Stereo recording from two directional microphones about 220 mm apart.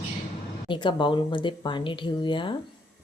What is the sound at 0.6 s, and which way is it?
Speech, 20° left (ahead or behind).